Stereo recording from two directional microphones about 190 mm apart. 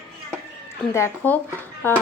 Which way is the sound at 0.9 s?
10° left (ahead or behind).